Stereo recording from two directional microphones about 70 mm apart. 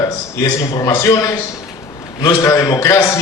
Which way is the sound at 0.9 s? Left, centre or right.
Left.